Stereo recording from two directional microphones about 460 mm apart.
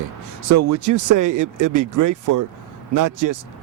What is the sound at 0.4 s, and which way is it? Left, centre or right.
Speech, right.